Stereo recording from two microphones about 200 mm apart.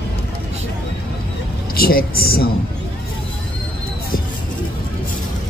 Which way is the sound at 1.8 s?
50° left (ahead or behind).